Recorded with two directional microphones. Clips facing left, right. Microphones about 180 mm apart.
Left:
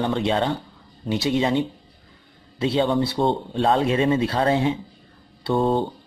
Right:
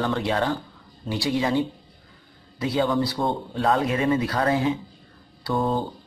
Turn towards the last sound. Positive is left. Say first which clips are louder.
# left 4 dB
turn(degrees=25)  # may be behind; listen again after turning